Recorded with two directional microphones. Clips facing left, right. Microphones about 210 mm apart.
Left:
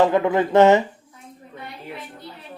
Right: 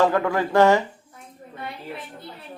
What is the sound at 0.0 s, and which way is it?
Speech, 20° left (ahead or behind).